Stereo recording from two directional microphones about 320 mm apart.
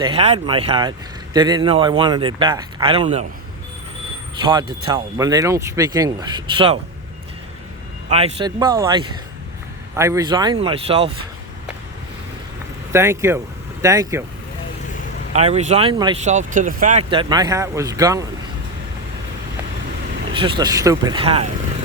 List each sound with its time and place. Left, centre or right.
0.0 s speech: centre
4.4 s speech: centre
8.1 s speech: centre
12.9 s speech: centre
15.3 s speech: centre
20.3 s speech: centre